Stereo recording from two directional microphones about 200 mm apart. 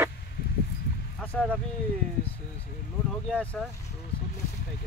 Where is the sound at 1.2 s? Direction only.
5° left (ahead or behind).